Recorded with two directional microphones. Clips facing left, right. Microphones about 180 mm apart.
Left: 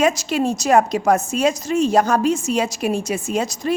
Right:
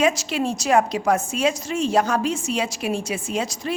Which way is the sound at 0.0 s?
40° left (ahead or behind).